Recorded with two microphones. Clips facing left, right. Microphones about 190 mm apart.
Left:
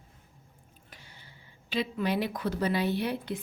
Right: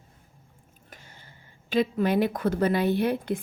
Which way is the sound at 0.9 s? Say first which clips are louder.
Right 4 dB; 45° right (ahead or behind).